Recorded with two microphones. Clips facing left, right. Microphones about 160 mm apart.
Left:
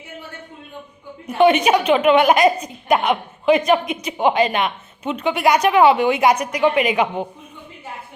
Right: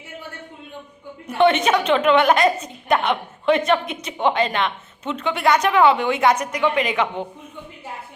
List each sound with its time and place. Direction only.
1.4 s a woman's voice: 15° left (ahead or behind)